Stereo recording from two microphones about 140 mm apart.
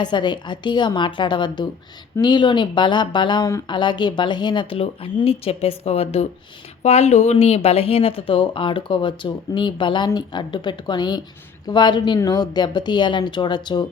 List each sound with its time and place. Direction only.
0.0 s speech: 30° left (ahead or behind)